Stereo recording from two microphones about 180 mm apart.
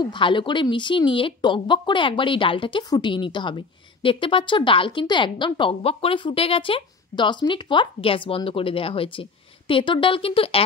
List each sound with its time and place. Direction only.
0.0 s speech: 25° left (ahead or behind)